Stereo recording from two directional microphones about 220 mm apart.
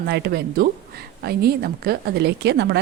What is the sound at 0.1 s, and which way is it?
Speech, 45° right (ahead or behind).